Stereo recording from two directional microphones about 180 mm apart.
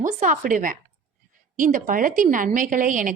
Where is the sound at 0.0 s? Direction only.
45° right (ahead or behind).